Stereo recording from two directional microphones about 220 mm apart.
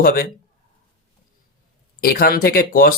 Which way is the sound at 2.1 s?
40° left (ahead or behind).